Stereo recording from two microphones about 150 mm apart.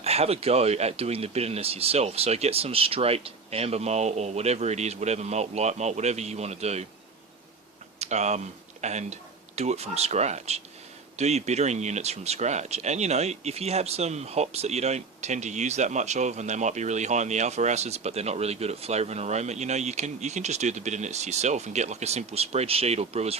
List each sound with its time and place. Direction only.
0.0 s speech: 45° right (ahead or behind)
7.9 s speech: 45° right (ahead or behind)